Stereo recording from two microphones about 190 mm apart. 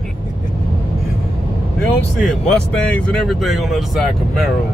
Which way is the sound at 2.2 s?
5° left (ahead or behind).